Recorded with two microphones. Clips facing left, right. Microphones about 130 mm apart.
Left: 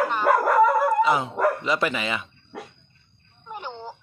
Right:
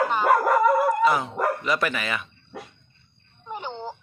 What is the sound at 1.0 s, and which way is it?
Speech, 20° left (ahead or behind).